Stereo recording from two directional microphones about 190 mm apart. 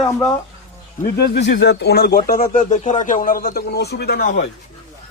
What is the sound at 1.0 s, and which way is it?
Speech, 60° left (ahead or behind).